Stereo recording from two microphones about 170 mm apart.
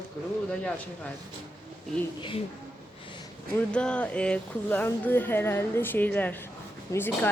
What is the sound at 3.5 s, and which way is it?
Speech, 5° left (ahead or behind).